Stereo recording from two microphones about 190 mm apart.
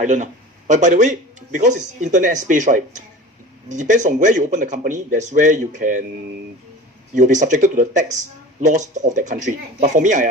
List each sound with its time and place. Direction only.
0.0 s speech: 40° right (ahead or behind)
7.1 s speech: 40° right (ahead or behind)